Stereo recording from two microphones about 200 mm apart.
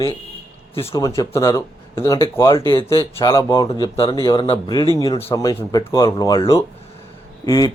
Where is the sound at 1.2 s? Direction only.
15° left (ahead or behind).